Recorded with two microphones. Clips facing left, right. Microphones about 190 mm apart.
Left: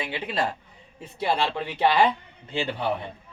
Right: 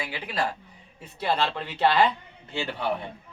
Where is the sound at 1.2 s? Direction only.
15° left (ahead or behind).